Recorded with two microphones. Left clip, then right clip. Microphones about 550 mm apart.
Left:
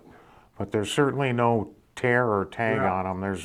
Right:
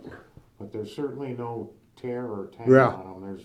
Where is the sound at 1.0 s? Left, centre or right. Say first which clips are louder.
Left 9 dB; left.